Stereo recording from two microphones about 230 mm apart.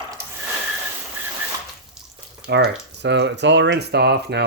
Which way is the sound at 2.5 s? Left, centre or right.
Right.